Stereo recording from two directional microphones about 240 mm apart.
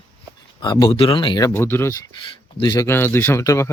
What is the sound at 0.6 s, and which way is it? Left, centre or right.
Speech, centre.